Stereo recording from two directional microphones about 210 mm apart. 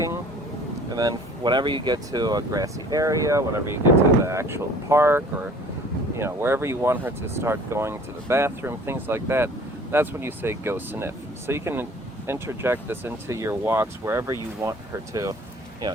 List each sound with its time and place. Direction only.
0.9 s speech: 20° right (ahead or behind)